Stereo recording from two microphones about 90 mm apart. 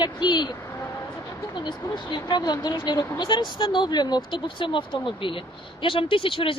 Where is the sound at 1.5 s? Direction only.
60° left (ahead or behind).